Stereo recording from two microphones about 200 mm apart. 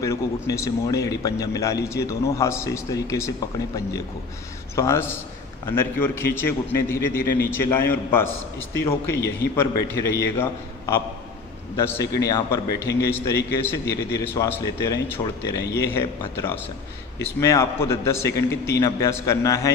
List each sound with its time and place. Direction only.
0.0 s a man's voice: 15° left (ahead or behind)